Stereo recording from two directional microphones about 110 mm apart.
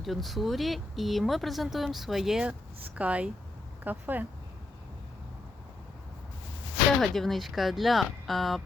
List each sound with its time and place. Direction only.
0.0 s speech: centre (ahead or behind); by 4.3 s 15° right (ahead or behind)
7.0 s speech: centre (ahead or behind)